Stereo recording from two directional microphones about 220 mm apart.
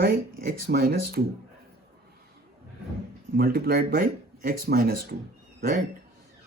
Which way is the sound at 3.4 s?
45° right (ahead or behind).